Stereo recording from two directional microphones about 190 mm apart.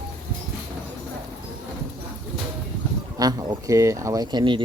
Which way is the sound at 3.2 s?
20° right (ahead or behind).